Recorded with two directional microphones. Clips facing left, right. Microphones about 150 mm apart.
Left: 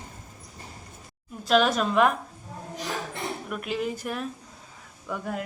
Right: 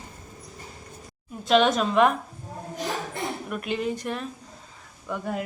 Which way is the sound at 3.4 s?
Centre (ahead or behind).